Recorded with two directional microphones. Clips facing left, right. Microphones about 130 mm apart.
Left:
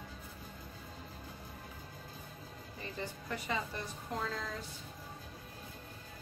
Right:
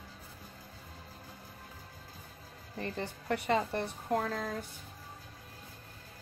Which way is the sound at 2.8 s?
60° right (ahead or behind).